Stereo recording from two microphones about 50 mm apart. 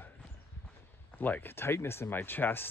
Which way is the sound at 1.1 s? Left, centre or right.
Left.